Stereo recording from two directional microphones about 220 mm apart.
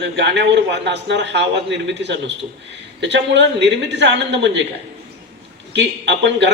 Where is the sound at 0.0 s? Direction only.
55° right (ahead or behind).